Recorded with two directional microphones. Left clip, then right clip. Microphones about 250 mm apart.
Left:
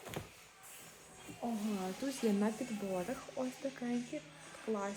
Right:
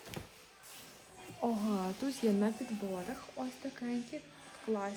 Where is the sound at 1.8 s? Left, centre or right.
Centre.